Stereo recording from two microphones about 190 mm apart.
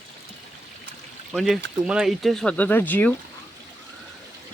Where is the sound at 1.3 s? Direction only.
Centre (ahead or behind).